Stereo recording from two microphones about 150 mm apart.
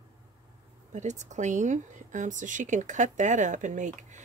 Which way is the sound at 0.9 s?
55° right (ahead or behind).